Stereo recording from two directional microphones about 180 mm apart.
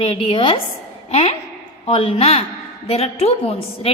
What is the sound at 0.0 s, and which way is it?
A woman's voice, 35° left (ahead or behind).